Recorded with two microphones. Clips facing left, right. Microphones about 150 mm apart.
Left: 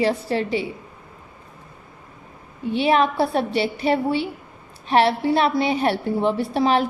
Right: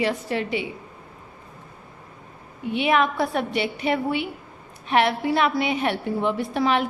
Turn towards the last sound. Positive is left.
turn(degrees=35)  # may be behind; listen again after turning